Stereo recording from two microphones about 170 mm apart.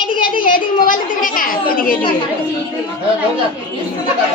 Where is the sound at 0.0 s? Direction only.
30° left (ahead or behind).